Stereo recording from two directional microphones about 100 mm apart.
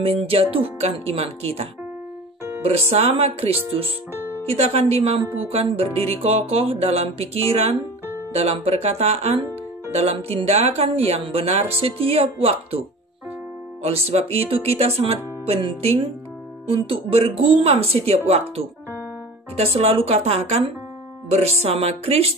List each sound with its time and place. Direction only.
0.0 s speech: 70° right (ahead or behind); by 5.2 s 90° right
5.5 s music: 85° right
6.2 s speech: 90° right
13.8 s speech: 85° right
16.6 s speech: 65° right (ahead or behind); by 18.4 s 90° right
19.5 s speech: 85° right